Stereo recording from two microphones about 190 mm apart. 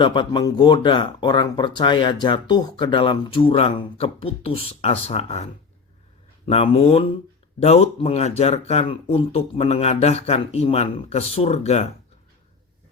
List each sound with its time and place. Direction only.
0.0 s speech: 25° left (ahead or behind)